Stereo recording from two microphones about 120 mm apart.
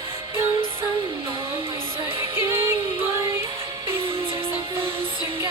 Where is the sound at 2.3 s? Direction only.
20° right (ahead or behind).